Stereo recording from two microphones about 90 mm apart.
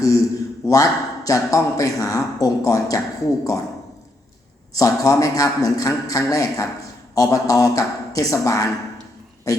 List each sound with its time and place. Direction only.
0.7 s speech: 40° left (ahead or behind)
4.7 s speech: 40° left (ahead or behind)